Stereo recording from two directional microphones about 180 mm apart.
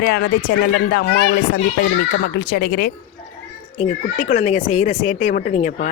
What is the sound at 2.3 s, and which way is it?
Speech, 60° left (ahead or behind).